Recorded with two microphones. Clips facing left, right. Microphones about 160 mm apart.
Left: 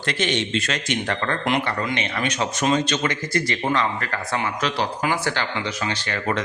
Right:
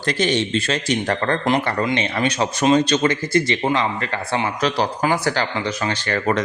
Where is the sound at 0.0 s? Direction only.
35° right (ahead or behind).